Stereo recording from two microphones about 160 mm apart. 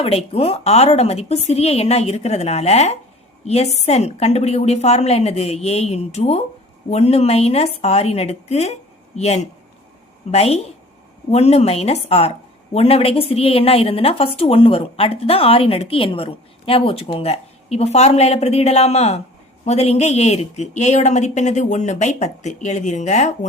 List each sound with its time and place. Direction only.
0.0 s a woman's voice: 40° left (ahead or behind)